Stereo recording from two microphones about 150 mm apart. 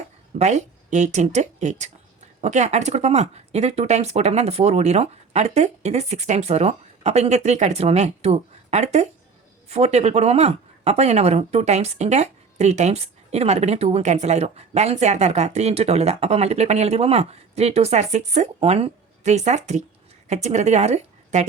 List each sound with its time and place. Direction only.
0.3 s speech: 50° right (ahead or behind)